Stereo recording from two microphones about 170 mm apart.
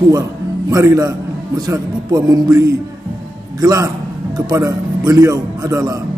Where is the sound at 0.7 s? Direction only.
20° right (ahead or behind).